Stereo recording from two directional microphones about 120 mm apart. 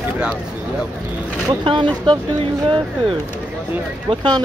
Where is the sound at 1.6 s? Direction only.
40° right (ahead or behind).